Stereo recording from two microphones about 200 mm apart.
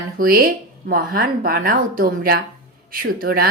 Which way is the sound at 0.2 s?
50° right (ahead or behind).